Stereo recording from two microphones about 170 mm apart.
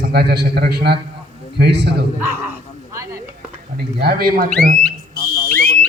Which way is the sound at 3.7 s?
65° right (ahead or behind).